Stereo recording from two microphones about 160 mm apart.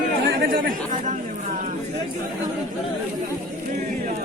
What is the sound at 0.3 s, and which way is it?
Chatter, 65° right (ahead or behind).